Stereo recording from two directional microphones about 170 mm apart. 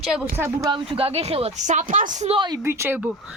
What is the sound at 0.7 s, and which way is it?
A woman's voice, 35° right (ahead or behind).